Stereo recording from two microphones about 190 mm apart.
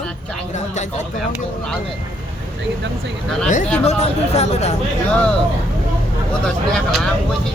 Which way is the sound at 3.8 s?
35° left (ahead or behind).